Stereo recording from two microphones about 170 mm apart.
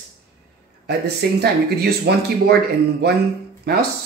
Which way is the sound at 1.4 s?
70° right (ahead or behind).